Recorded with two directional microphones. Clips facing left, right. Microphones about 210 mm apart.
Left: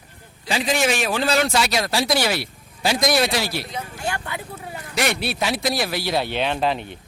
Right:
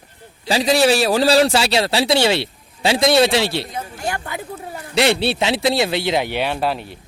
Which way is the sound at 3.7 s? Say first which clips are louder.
Right 2 dB; 40° right (ahead or behind).